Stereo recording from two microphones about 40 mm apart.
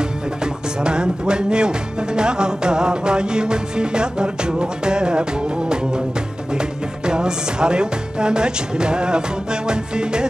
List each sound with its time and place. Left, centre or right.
0.8 s music: right
6.5 s music: right